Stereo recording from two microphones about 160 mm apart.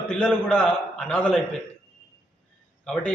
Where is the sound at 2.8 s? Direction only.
5° left (ahead or behind).